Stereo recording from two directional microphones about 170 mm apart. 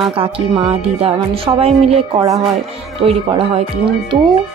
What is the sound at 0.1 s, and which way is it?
Speech, 35° right (ahead or behind).